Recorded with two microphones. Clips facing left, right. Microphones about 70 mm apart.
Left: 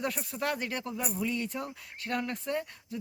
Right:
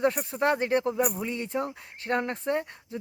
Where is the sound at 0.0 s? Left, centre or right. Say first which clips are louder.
Right 8 dB; right.